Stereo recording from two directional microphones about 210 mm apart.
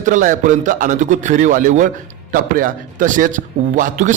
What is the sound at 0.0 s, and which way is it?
A man's voice, 35° right (ahead or behind).